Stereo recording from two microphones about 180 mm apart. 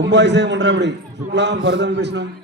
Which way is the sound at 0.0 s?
75° right (ahead or behind).